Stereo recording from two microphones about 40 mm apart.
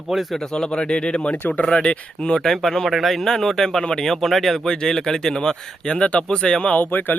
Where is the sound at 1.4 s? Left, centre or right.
Left.